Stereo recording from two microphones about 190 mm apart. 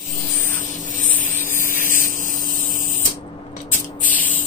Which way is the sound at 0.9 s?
45° left (ahead or behind).